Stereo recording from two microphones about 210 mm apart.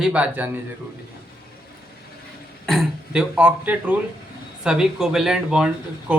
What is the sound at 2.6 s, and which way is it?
Throat clearing, centre (ahead or behind).